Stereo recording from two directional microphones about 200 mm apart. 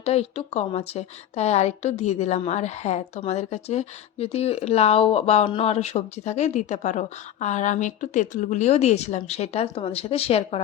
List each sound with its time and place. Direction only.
0.0 s speech: 30° left (ahead or behind)